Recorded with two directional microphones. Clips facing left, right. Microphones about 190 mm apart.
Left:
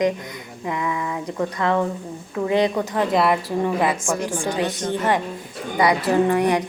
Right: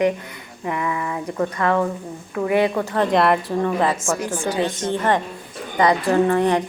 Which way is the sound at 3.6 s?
15° left (ahead or behind).